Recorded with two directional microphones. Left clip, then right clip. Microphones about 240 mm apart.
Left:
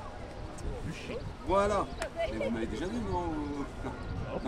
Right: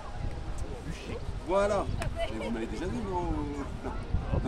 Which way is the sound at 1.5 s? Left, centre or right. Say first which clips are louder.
Right 1 dB; centre.